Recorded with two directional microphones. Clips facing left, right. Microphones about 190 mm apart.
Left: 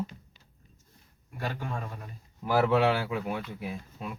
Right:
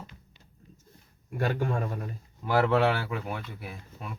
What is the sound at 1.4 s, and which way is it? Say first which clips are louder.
Speech: right 6 dB; 50° right (ahead or behind).